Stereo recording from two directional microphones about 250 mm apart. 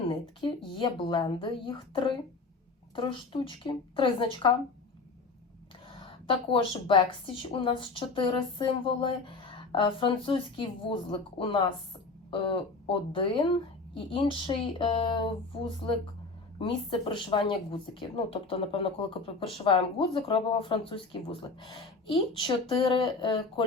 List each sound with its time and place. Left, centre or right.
0.4 s a woman's voice: centre
6.1 s a woman's voice: left